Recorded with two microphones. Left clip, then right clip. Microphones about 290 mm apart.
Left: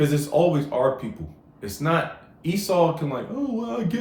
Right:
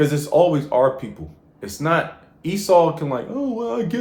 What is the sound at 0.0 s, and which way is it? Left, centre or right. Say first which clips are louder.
Speech: right 4 dB; right.